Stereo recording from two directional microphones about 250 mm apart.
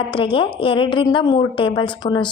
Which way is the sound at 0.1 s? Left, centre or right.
Left.